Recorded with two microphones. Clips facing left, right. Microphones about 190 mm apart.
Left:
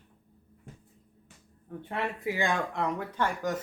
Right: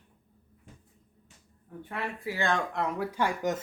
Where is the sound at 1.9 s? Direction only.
20° left (ahead or behind).